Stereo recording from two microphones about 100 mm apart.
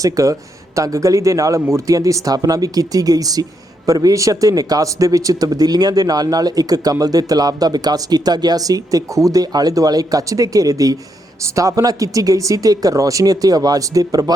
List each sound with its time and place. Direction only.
0.0 s speech: 35° right (ahead or behind)